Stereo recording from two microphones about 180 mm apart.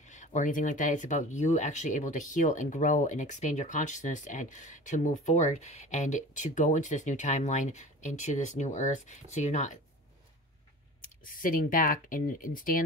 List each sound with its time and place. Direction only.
0.0 s speech: 40° left (ahead or behind)
11.2 s speech: 50° left (ahead or behind)